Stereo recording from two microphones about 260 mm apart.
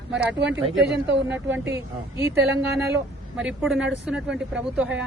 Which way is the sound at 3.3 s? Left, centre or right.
Centre.